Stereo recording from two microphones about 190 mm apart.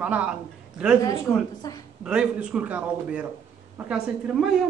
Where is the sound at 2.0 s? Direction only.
5° right (ahead or behind).